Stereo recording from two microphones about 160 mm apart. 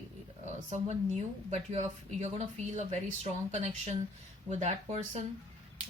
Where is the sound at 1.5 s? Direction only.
45° right (ahead or behind).